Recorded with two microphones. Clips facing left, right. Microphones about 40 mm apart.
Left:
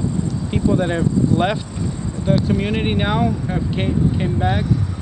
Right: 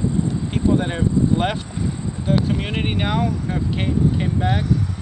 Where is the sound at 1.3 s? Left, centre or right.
Right.